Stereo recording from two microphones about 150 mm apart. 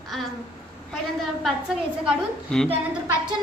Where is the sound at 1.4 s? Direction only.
Centre (ahead or behind).